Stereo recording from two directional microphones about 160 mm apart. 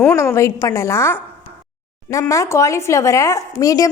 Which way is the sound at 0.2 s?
15° left (ahead or behind).